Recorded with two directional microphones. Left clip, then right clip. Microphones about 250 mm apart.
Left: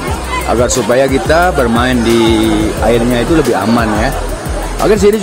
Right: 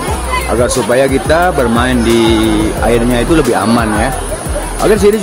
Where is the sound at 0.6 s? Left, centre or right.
Centre.